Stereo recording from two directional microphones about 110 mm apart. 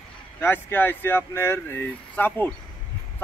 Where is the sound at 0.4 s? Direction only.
20° left (ahead or behind).